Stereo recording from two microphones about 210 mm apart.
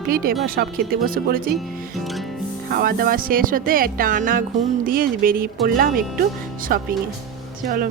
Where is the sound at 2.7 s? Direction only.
45° right (ahead or behind).